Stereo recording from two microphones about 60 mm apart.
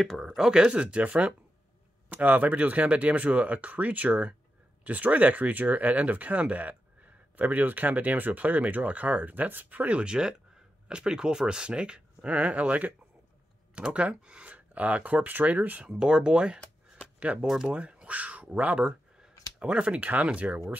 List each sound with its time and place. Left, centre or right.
0.0 s speech: centre
0.5 s speech: centre
15.9 s speech: centre